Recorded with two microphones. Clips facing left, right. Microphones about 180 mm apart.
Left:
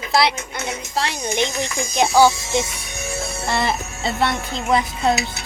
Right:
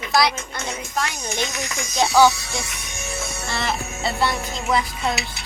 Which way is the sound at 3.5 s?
20° left (ahead or behind).